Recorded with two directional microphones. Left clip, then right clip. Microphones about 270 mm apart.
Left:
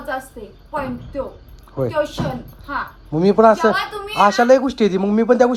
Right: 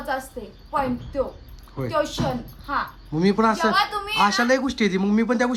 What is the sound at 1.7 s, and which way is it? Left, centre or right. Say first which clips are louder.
A woman's voice: left 4 dB; centre.